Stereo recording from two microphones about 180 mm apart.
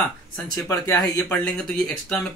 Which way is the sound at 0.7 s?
20° left (ahead or behind).